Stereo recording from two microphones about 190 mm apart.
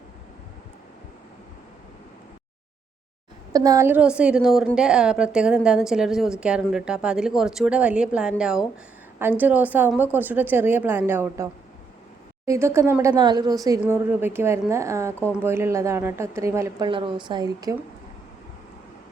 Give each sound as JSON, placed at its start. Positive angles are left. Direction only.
{"t": 3.5, "sound": "a woman's voice", "side_deg": -20}
{"t": 12.5, "sound": "a woman's voice", "side_deg": -15}
{"t": 16.9, "sound": "a woman's voice", "side_deg": -25}